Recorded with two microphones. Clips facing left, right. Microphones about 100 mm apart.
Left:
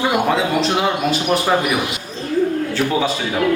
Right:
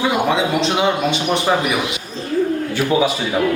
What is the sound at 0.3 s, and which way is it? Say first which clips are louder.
A man's voice: even; centre (ahead or behind).